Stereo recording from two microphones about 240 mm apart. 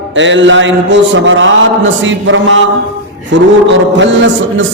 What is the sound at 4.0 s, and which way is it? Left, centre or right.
Speech, right.